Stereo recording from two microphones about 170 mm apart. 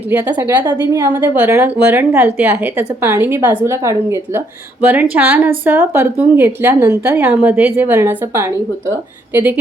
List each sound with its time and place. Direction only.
0.2 s speech: 10° right (ahead or behind)